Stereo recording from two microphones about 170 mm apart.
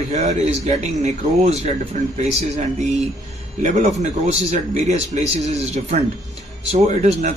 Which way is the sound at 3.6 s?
45° right (ahead or behind).